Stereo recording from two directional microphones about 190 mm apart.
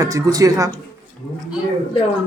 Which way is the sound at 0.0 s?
15° right (ahead or behind).